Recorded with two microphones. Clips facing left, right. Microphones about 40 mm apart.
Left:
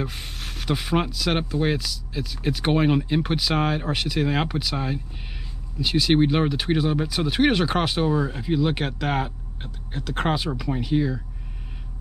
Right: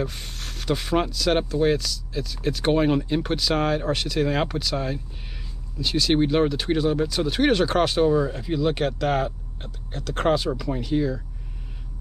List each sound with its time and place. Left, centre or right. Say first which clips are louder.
0.0 s speech: right 1 dB; centre